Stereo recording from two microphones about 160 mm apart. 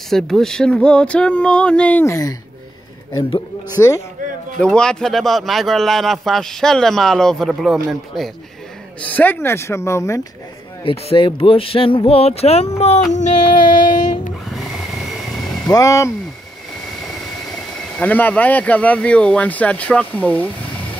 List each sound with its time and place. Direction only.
0.1 s speech: 5° left (ahead or behind); by 2.3 s 20° left (ahead or behind)
3.8 s speech: 15° left (ahead or behind)
4.6 s a man's voice: 5° left (ahead or behind)
9.0 s speech: 10° left (ahead or behind)
10.8 s speech: 35° left (ahead or behind)
13.1 s a sound: 50° left (ahead or behind)
14.5 s vehicle: centre (ahead or behind)
15.7 s speech: 20° left (ahead or behind)
17.9 s speech: 10° left (ahead or behind)